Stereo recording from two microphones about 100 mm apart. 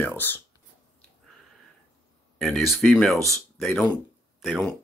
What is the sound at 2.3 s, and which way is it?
Speech, 5° left (ahead or behind).